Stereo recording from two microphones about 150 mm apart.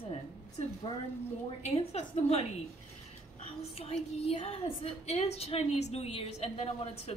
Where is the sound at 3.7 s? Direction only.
40° left (ahead or behind).